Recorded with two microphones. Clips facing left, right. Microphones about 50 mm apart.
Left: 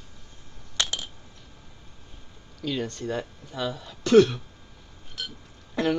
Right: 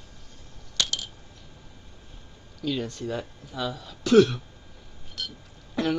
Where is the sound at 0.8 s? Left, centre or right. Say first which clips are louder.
Even; left.